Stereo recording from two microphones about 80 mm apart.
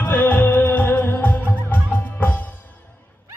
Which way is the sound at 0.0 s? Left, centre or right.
Centre.